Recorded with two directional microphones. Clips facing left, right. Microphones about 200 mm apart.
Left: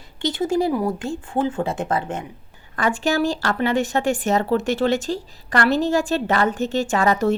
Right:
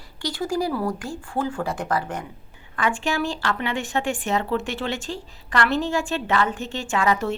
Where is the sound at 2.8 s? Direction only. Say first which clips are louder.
Left 4 dB; 40° left (ahead or behind).